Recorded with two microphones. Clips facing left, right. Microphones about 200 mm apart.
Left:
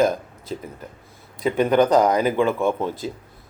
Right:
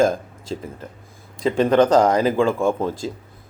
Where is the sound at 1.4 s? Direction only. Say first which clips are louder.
Right 2 dB; 30° right (ahead or behind).